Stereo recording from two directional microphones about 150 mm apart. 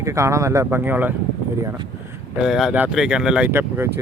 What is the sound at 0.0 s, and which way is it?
Speech, 20° right (ahead or behind).